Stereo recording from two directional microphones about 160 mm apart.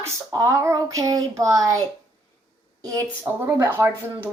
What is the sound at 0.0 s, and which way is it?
A woman's voice, 20° right (ahead or behind).